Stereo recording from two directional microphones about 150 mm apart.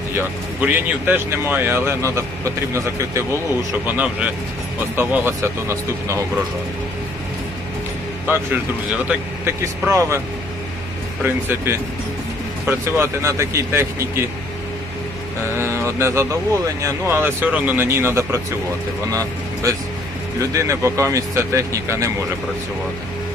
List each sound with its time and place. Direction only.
0.1 s speech: 15° right (ahead or behind)
8.3 s speech: 10° right (ahead or behind)
11.2 s speech: 15° right (ahead or behind)
15.5 s speech: 15° right (ahead or behind)
20.4 s speech: 20° right (ahead or behind)